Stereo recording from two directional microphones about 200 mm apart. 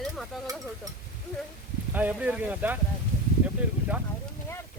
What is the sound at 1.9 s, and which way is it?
A man's voice, 10° right (ahead or behind).